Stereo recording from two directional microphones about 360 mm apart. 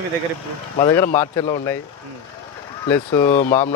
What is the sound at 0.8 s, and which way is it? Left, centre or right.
Speech, centre.